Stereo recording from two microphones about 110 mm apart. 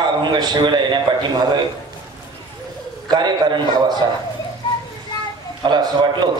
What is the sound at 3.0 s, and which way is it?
Speech, 40° right (ahead or behind).